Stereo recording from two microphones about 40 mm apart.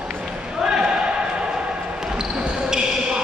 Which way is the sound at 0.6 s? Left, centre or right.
Centre.